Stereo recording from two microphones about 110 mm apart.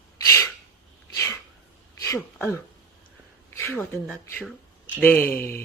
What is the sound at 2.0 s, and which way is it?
Speech, 25° left (ahead or behind).